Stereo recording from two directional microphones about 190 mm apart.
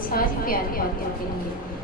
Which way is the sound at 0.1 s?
50° left (ahead or behind).